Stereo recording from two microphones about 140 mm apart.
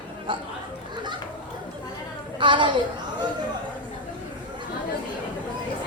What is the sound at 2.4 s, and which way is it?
Speech, 35° right (ahead or behind).